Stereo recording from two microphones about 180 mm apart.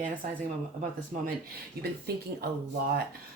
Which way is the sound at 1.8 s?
60° right (ahead or behind).